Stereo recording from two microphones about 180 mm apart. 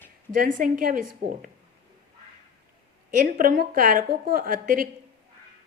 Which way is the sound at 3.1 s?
50° right (ahead or behind).